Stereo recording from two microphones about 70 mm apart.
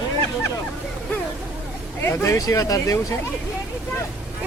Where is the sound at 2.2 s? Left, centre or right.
Left.